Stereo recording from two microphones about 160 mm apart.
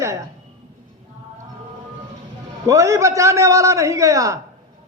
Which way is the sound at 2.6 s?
20° right (ahead or behind).